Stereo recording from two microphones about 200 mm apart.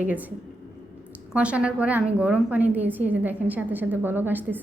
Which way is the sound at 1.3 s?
5° right (ahead or behind).